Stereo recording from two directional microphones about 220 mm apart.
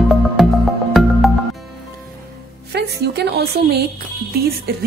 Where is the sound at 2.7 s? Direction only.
50° right (ahead or behind).